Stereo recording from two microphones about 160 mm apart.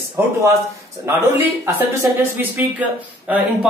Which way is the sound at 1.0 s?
15° right (ahead or behind).